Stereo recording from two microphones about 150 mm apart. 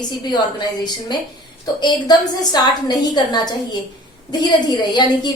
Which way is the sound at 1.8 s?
30° left (ahead or behind).